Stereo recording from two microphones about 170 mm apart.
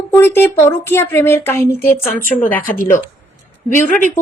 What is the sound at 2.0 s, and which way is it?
Speech, 55° left (ahead or behind).